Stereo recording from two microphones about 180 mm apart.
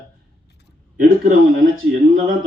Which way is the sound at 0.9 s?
50° right (ahead or behind).